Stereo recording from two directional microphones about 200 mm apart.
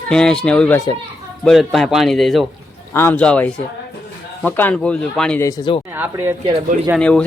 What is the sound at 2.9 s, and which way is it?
Speech, 10° left (ahead or behind).